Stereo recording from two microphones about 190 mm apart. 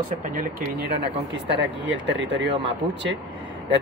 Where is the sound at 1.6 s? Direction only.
70° right (ahead or behind).